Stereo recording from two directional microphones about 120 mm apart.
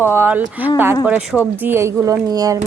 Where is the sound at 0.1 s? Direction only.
15° right (ahead or behind).